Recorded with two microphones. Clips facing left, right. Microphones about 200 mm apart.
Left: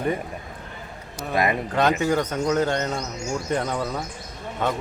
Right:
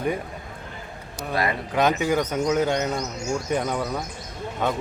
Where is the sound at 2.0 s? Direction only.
10° right (ahead or behind).